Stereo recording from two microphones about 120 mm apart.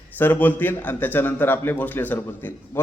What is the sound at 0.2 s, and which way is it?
A man's voice, 15° left (ahead or behind).